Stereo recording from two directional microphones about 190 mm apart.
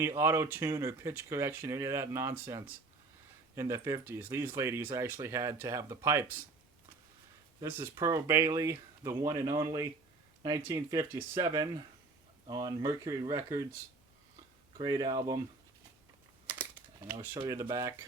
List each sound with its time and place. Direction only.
0.0 s speech: 15° right (ahead or behind)
7.6 s speech: 15° right (ahead or behind)
14.8 s speech: 20° right (ahead or behind)
17.2 s speech: 20° right (ahead or behind)